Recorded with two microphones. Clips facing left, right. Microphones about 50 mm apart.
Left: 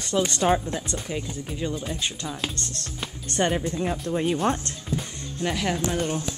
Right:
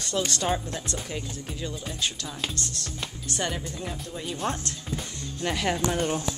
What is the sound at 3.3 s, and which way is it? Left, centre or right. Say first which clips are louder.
Speech: left 7 dB; left.